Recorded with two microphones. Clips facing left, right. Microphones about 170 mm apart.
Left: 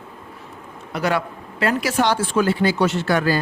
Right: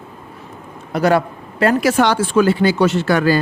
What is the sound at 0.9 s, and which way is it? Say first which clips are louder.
Speech: right 7 dB; 40° right (ahead or behind).